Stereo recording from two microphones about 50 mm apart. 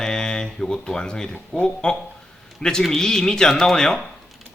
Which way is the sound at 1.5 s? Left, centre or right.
Centre.